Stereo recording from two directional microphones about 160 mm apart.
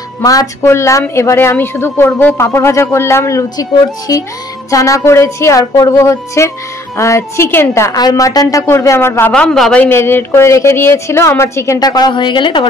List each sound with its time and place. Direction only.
0.2 s a woman's voice: 20° left (ahead or behind)